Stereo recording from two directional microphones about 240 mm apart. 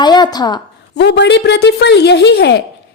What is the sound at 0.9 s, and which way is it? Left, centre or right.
A woman's voice, left.